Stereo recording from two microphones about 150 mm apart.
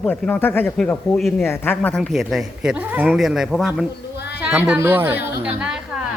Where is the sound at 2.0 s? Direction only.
Centre (ahead or behind).